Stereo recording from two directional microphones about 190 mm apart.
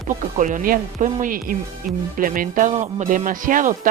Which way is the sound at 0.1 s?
40° right (ahead or behind).